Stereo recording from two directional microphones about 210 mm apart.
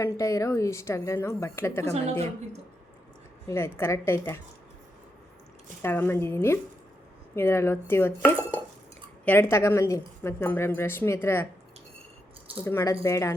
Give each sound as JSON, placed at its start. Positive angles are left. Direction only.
{"t": 0.0, "sound": "speech", "side_deg": 15}
{"t": 1.9, "sound": "a woman's voice", "side_deg": -30}
{"t": 3.4, "sound": "speech", "side_deg": 10}
{"t": 5.8, "sound": "speech", "side_deg": 10}
{"t": 12.6, "sound": "speech", "side_deg": 15}